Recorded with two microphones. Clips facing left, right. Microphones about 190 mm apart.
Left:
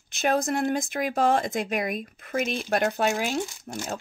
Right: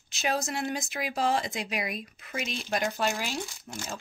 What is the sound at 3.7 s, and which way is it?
Speech, 40° left (ahead or behind).